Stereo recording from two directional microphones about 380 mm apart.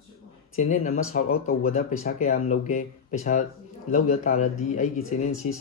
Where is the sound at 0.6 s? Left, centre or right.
Centre.